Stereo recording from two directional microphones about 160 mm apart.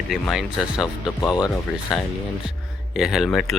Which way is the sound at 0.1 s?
5° right (ahead or behind).